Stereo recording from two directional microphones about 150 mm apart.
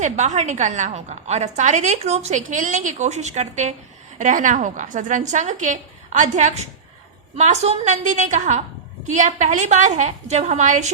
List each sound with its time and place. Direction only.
0.0 s a woman's voice: 50° right (ahead or behind)